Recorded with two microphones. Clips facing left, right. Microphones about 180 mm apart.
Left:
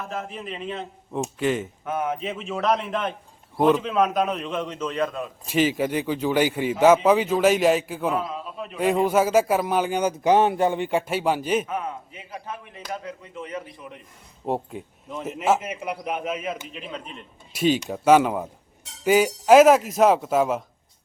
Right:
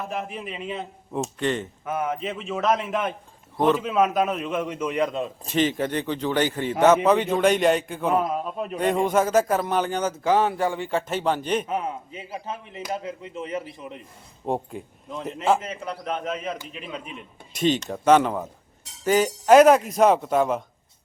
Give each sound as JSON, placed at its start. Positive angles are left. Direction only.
{"t": 0.0, "sound": "a man's voice", "side_deg": -15}
{"t": 1.2, "sound": "a man's voice", "side_deg": 5}
{"t": 5.5, "sound": "a man's voice", "side_deg": 5}
{"t": 8.1, "sound": "a man's voice", "side_deg": -45}
{"t": 8.8, "sound": "a man's voice", "side_deg": 5}
{"t": 11.7, "sound": "speech", "side_deg": -25}
{"t": 14.4, "sound": "a man's voice", "side_deg": 0}
{"t": 17.5, "sound": "a man's voice", "side_deg": 10}